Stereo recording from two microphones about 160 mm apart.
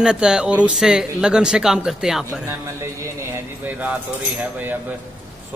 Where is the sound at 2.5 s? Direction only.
15° right (ahead or behind).